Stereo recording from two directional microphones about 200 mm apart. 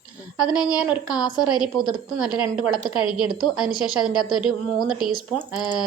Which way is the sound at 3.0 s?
20° left (ahead or behind).